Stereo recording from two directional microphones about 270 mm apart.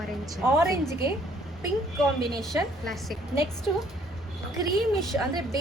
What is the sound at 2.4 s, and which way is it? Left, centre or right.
A woman's voice, centre.